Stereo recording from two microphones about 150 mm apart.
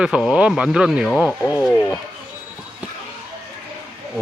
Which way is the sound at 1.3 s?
15° left (ahead or behind).